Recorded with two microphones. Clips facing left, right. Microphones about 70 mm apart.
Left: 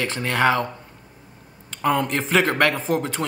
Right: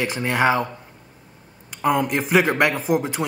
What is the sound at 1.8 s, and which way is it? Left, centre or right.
A man's voice, centre.